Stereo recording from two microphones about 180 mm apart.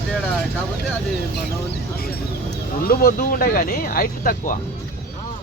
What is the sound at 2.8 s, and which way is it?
Speech, 55° left (ahead or behind).